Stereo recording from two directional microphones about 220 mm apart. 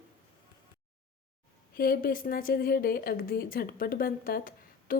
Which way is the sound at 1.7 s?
40° left (ahead or behind).